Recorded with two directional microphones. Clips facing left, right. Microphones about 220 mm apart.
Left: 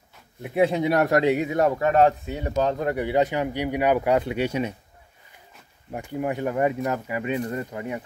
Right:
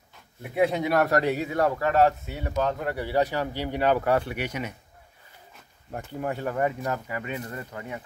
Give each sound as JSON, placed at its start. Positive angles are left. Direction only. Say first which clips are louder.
{"t": 0.6, "sound": "speech", "louder": "left 3 dB", "side_deg": 25}
{"t": 0.9, "sound": "speech", "louder": "left 3 dB", "side_deg": 15}
{"t": 5.9, "sound": "speech", "louder": "left 3 dB", "side_deg": 15}